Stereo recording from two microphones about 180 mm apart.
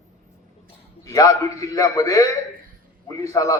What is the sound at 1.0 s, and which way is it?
A man's voice, 20° left (ahead or behind).